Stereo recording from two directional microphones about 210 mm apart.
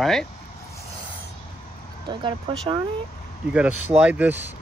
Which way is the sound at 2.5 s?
25° right (ahead or behind).